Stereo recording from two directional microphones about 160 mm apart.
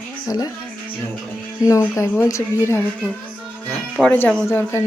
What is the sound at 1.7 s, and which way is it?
A woman's voice, 20° left (ahead or behind).